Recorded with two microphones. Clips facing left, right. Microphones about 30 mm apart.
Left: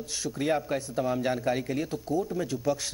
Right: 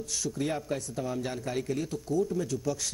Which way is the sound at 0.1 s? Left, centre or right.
Left.